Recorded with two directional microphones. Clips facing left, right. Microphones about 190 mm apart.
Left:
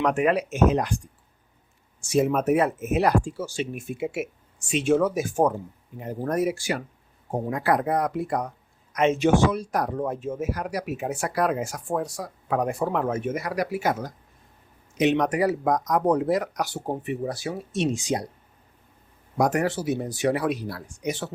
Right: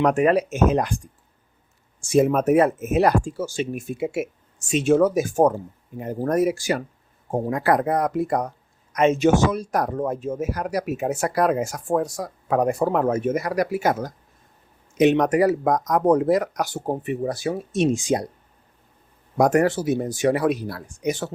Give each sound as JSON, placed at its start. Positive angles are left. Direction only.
{"t": 0.0, "sound": "speech", "side_deg": -40}
{"t": 2.0, "sound": "speech", "side_deg": -50}
{"t": 19.4, "sound": "speech", "side_deg": -50}